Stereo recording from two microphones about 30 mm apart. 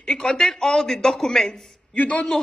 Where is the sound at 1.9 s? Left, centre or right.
Left.